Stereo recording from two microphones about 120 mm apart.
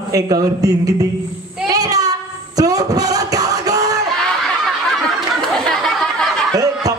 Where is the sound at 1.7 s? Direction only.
30° right (ahead or behind).